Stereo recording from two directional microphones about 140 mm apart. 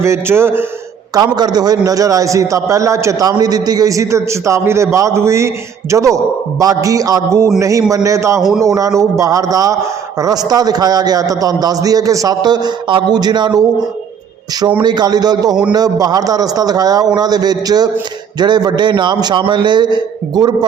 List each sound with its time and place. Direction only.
0.0 s a man's voice: 20° right (ahead or behind)
1.1 s a man's voice: 30° right (ahead or behind)
8.4 s a man's voice: centre (ahead or behind)
8.6 s a man's voice: 25° right (ahead or behind)
14.8 s a man's voice: 30° right (ahead or behind)